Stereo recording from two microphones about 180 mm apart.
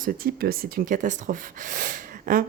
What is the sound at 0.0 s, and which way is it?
A woman's voice, 55° right (ahead or behind).